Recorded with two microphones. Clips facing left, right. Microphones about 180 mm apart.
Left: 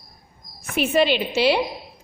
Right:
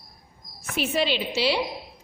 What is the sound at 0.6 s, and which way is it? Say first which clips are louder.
A woman's voice: left 6 dB; 55° left (ahead or behind).